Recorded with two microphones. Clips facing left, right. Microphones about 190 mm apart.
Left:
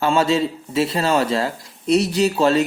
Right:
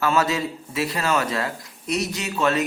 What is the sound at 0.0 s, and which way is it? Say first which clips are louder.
A man's voice: left 4 dB; 30° left (ahead or behind).